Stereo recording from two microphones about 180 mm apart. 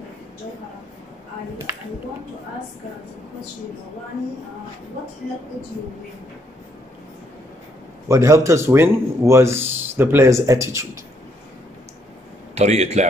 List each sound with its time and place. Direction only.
8.1 s a man's voice: 15° right (ahead or behind)
12.5 s speech: 35° right (ahead or behind)